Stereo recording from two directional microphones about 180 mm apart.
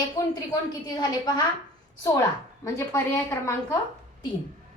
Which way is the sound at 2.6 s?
15° left (ahead or behind).